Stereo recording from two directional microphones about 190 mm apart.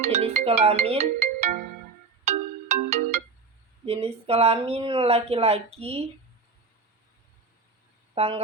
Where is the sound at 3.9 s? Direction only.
30° right (ahead or behind).